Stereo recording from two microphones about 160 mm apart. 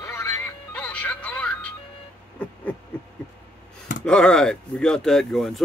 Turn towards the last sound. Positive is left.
turn(degrees=0)  # may be behind; listen again after turning